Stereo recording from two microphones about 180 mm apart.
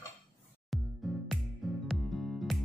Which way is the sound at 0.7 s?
Centre (ahead or behind).